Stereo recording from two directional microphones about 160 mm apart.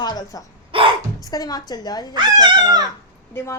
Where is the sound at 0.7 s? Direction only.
35° right (ahead or behind).